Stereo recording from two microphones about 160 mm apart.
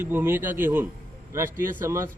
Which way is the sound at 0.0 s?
15° right (ahead or behind).